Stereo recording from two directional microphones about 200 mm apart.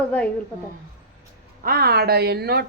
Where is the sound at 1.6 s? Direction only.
50° right (ahead or behind).